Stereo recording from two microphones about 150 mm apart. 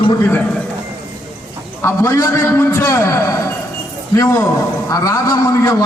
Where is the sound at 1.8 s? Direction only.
15° left (ahead or behind).